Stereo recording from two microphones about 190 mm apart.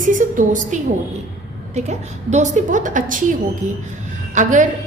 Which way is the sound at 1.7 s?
35° right (ahead or behind).